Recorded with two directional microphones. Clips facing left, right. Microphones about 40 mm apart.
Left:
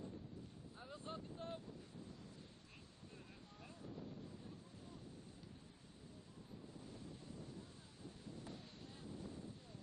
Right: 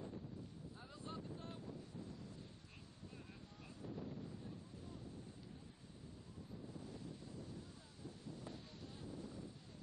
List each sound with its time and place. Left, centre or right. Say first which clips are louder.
0.9 s wind noise: even; left